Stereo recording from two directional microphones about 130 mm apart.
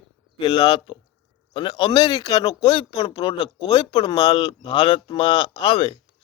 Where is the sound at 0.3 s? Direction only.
35° left (ahead or behind).